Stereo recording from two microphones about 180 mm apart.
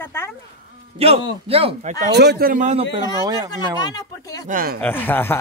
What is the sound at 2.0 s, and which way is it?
Speech, 65° right (ahead or behind).